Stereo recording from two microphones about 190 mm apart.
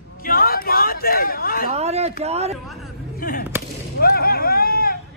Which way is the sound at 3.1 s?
50° left (ahead or behind).